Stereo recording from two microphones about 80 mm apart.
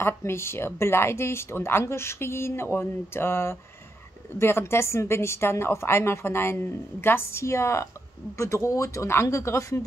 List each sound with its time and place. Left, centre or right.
0.0 s a woman's voice: left